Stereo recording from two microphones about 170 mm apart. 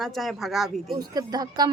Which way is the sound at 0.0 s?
Centre (ahead or behind).